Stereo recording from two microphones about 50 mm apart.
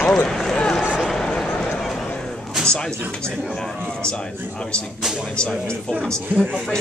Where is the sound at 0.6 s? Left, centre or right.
Centre.